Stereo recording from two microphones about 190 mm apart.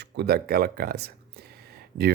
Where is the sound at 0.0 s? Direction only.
55° right (ahead or behind).